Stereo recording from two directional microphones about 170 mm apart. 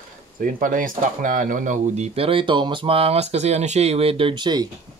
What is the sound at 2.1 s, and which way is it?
Speech, 30° right (ahead or behind).